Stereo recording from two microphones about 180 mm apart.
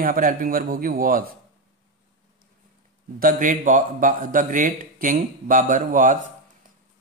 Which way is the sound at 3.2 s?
45° right (ahead or behind).